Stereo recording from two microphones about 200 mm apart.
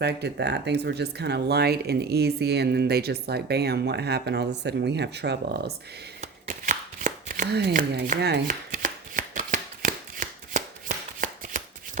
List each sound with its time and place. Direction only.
0.0 s speech: 55° right (ahead or behind)
6.2 s shuffling cards: 40° right (ahead or behind)
7.7 s chopping: 40° right (ahead or behind)